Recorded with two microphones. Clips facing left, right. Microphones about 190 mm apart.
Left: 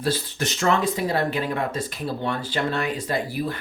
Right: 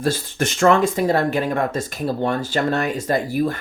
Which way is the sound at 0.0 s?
50° right (ahead or behind).